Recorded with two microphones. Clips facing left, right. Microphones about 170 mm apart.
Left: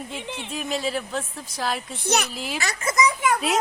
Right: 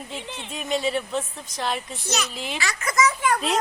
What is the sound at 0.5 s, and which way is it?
Speech, centre (ahead or behind).